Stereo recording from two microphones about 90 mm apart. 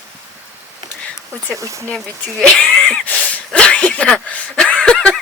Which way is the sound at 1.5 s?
35° right (ahead or behind).